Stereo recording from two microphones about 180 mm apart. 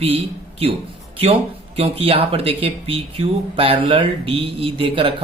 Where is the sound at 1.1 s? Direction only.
35° right (ahead or behind).